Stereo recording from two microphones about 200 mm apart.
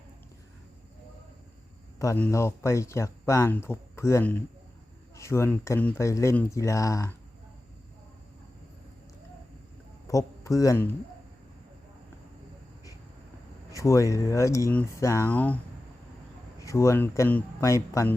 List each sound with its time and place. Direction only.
2.0 s speech: 10° left (ahead or behind)
10.1 s a man's voice: 15° left (ahead or behind)
13.7 s speech: 15° left (ahead or behind)
16.6 s speech: 15° left (ahead or behind)